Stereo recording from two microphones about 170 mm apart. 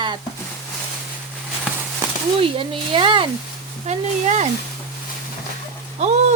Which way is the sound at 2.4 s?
30° right (ahead or behind).